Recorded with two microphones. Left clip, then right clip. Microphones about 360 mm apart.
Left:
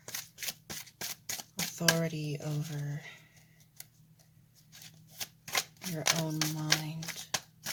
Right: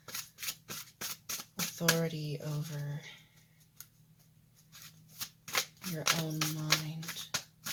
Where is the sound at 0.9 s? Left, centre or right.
Centre.